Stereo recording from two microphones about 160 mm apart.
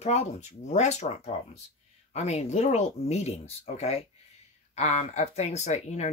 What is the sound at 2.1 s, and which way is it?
Speech, 45° left (ahead or behind).